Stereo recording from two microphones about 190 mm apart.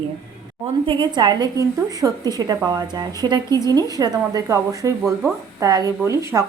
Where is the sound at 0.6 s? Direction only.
25° right (ahead or behind).